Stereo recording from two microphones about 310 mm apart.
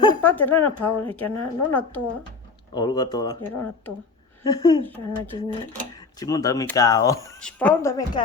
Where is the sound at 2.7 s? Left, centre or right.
Centre.